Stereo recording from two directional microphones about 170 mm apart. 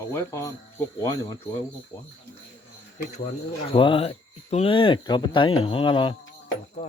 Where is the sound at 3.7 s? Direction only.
30° left (ahead or behind).